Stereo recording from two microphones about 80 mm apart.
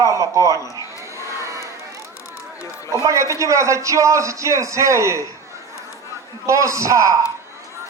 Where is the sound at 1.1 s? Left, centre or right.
Right.